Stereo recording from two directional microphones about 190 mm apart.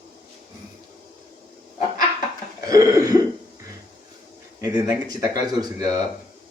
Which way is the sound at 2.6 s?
15° right (ahead or behind).